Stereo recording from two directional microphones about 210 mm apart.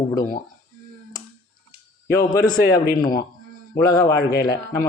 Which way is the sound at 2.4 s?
45° left (ahead or behind).